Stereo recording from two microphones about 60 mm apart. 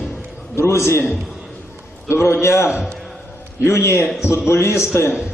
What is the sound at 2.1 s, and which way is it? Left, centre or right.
A man's voice, left.